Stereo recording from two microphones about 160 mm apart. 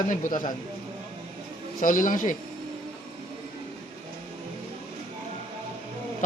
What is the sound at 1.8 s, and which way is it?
Speech, 55° left (ahead or behind).